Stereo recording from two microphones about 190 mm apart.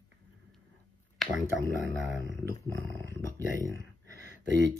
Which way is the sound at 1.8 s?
70° right (ahead or behind).